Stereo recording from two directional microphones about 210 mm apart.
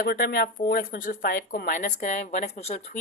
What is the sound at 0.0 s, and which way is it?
Speech, 45° left (ahead or behind).